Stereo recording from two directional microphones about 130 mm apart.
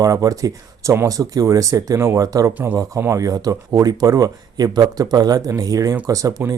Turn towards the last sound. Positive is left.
turn(degrees=-25)  # may be behind; listen again after turning